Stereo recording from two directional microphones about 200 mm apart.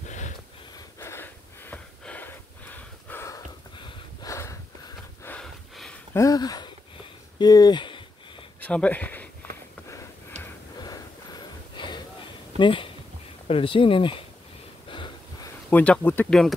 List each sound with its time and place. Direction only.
0.7 s wheeze: 15° left (ahead or behind)
6.1 s speech: 20° left (ahead or behind)
7.3 s a sound: 20° left (ahead or behind)
8.5 s speech: 5° left (ahead or behind)
10.8 s a sound: 20° left (ahead or behind)
13.5 s speech: 25° left (ahead or behind)
14.9 s wheeze: 25° left (ahead or behind)
15.7 s speech: 5° left (ahead or behind)